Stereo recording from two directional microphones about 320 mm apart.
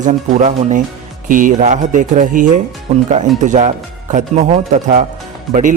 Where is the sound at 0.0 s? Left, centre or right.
Right.